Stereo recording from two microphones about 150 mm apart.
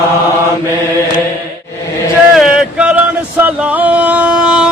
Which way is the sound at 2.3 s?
5° right (ahead or behind).